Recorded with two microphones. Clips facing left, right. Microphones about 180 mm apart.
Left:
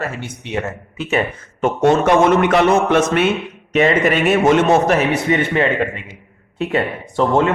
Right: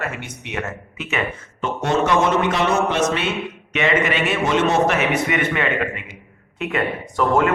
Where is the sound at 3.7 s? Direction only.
40° left (ahead or behind).